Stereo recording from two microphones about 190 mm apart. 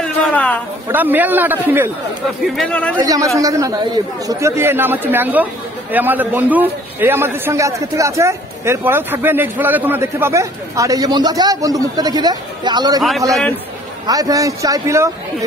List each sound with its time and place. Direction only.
0.0 s a sound: 10° left (ahead or behind)
0.9 s speech: 10° right (ahead or behind)
2.5 s speech: 5° left (ahead or behind)
3.3 s speech: 15° right (ahead or behind)
14.0 s speech: 20° right (ahead or behind)